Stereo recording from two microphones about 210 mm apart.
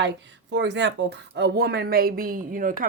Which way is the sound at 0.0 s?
55° right (ahead or behind).